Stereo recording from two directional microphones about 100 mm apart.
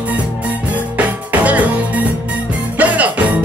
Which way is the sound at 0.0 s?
15° right (ahead or behind).